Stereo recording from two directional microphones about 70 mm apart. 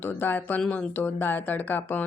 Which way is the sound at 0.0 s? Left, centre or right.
Left.